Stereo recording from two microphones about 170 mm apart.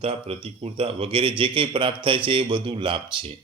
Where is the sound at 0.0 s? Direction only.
35° right (ahead or behind).